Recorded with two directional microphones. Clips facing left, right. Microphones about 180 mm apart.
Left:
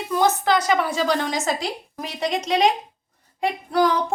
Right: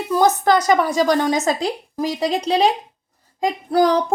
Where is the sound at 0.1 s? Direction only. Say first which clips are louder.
Right 4 dB; 40° right (ahead or behind).